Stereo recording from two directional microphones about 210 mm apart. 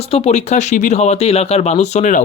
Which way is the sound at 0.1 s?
30° left (ahead or behind).